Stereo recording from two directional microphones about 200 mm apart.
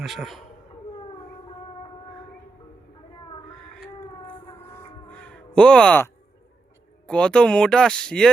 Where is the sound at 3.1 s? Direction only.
25° left (ahead or behind).